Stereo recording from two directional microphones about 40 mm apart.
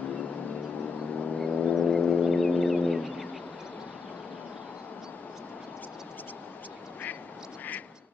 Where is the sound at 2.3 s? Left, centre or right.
Centre.